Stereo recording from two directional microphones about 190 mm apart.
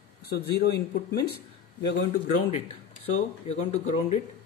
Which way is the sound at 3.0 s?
35° left (ahead or behind).